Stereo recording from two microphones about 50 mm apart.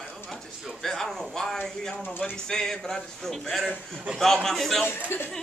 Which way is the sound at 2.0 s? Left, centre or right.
Left.